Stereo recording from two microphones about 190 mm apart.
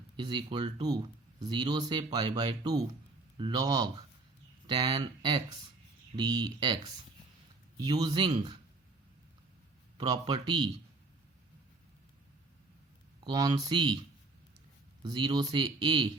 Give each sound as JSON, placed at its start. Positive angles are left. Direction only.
{"t": 0.2, "sound": "speech", "side_deg": -25}
{"t": 7.8, "sound": "speech", "side_deg": -20}
{"t": 10.0, "sound": "speech", "side_deg": -20}
{"t": 13.2, "sound": "speech", "side_deg": -25}
{"t": 15.0, "sound": "speech", "side_deg": -25}